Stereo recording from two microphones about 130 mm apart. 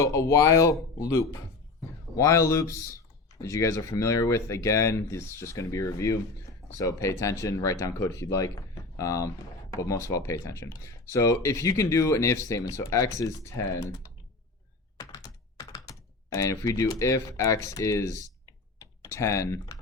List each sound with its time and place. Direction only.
0.0 s speech: 25° left (ahead or behind)
14.9 s typing: 30° left (ahead or behind)